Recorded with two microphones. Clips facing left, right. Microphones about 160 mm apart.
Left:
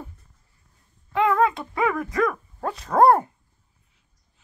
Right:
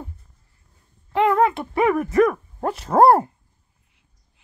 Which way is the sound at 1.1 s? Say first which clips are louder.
Right 2 dB; 25° right (ahead or behind).